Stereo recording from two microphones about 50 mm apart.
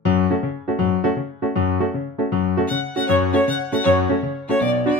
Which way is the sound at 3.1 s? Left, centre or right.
Left.